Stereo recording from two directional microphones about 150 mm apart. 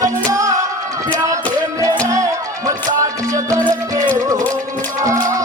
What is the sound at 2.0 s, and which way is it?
Music, 20° right (ahead or behind).